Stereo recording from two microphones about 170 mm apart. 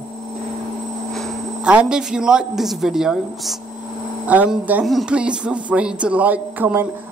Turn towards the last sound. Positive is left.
turn(degrees=-10)  # may be behind; listen again after turning